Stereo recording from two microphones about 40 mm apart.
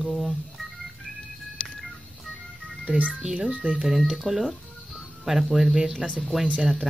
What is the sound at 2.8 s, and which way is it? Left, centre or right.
Speech, right.